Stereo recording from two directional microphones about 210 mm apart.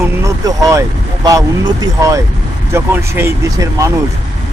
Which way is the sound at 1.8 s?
15° right (ahead or behind).